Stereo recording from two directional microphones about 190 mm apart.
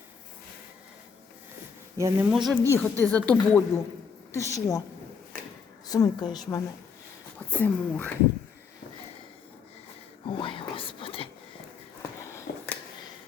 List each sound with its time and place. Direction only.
2.0 s speech: 15° right (ahead or behind)
2.3 s speech: centre (ahead or behind)
2.6 s a woman's voice: 10° left (ahead or behind)
5.9 s a woman's voice: 20° left (ahead or behind)
7.3 s speech: 10° left (ahead or behind)
10.2 s whispering: 25° left (ahead or behind)
12.3 s a sound: 15° left (ahead or behind)